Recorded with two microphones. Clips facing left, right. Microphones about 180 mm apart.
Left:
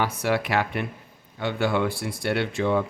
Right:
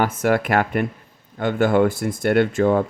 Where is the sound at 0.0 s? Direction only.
50° right (ahead or behind).